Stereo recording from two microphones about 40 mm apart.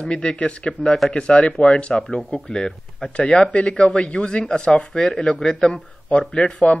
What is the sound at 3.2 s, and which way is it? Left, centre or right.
Speech, left.